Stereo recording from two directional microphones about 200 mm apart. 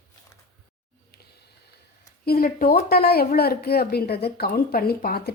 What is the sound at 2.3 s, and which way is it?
Speech, 50° left (ahead or behind).